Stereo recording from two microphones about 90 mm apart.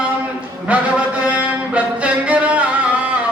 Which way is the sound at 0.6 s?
15° right (ahead or behind).